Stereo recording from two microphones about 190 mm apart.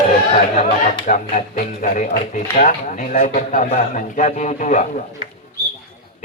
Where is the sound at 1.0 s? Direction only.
40° left (ahead or behind).